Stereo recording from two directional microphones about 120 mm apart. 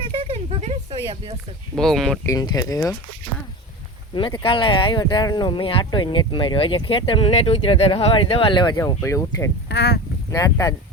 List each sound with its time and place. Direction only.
0.0 s a sound: 50° right (ahead or behind)
1.7 s speech: 5° left (ahead or behind)
2.2 s speech: 30° left (ahead or behind)
4.1 s speech: 45° left (ahead or behind)
7.3 s speech: 55° left (ahead or behind); by 8.8 s 40° left (ahead or behind)
9.0 s speech: 25° left (ahead or behind)